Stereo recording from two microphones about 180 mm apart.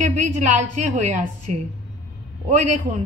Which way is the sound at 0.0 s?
40° right (ahead or behind).